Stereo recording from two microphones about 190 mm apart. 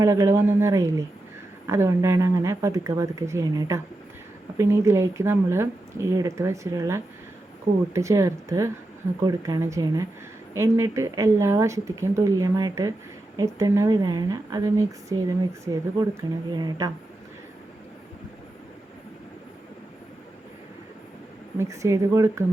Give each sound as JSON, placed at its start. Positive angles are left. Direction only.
{"t": 0.0, "sound": "speech", "side_deg": -15}
{"t": 21.6, "sound": "speech", "side_deg": -15}